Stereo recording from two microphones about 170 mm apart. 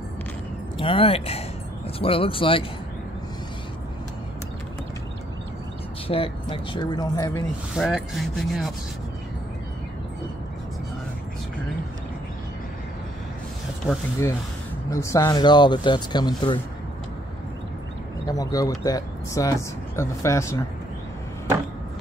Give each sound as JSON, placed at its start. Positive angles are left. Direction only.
{"t": 0.7, "sound": "speech", "side_deg": 30}
{"t": 6.0, "sound": "speech", "side_deg": 35}
{"t": 7.7, "sound": "speech", "side_deg": 0}
{"t": 14.9, "sound": "speech", "side_deg": 20}
{"t": 18.2, "sound": "speech", "side_deg": 20}